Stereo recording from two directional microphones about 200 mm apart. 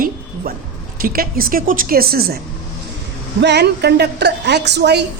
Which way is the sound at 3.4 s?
55° right (ahead or behind).